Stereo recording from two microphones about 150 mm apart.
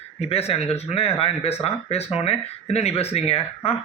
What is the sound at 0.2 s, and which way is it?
A man's voice, 45° left (ahead or behind).